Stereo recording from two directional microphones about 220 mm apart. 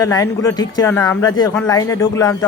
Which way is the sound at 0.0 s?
15° left (ahead or behind).